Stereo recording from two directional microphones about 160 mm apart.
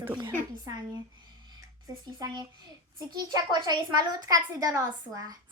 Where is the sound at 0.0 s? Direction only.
20° right (ahead or behind).